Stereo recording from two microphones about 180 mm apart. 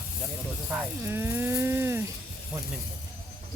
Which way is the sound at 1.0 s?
15° right (ahead or behind).